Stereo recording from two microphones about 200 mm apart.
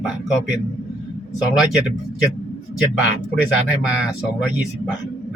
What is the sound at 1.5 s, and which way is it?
Speech, centre (ahead or behind).